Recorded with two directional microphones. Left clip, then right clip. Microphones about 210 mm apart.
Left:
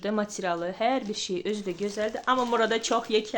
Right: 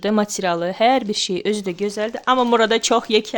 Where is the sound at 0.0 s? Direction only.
50° right (ahead or behind).